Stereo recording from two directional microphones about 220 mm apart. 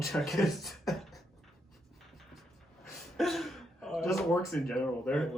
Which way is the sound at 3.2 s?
Centre (ahead or behind).